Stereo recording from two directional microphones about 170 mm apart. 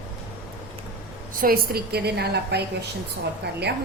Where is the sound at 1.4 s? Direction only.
65° right (ahead or behind).